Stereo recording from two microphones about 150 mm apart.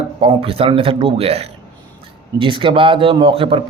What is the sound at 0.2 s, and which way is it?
A man's voice, 40° right (ahead or behind).